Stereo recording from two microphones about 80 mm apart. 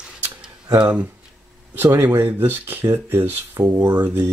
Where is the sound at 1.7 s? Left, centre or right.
Right.